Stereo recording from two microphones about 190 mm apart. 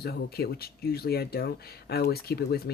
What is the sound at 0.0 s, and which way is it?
Speech, 55° left (ahead or behind).